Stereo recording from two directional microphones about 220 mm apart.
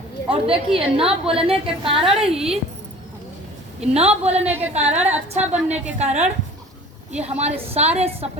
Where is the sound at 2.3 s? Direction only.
5° right (ahead or behind).